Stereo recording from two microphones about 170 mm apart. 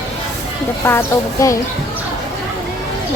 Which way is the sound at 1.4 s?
20° left (ahead or behind).